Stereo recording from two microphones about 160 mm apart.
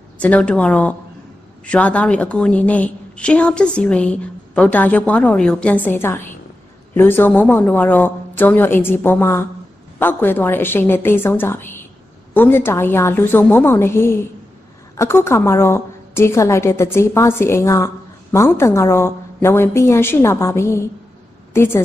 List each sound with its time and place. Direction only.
0.2 s a woman's voice: 10° left (ahead or behind)